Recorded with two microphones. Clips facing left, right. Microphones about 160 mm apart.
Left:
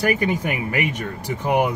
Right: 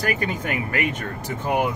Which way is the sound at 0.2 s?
15° left (ahead or behind).